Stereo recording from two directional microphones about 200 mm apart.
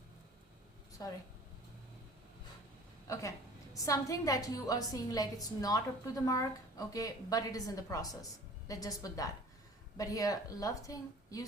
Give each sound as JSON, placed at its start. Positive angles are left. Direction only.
{"t": 1.0, "sound": "a woman's voice", "side_deg": 15}
{"t": 3.1, "sound": "a woman's voice", "side_deg": 15}